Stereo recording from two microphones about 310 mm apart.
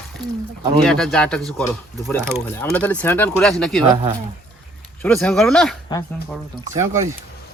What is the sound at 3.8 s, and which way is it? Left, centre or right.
Speech, centre.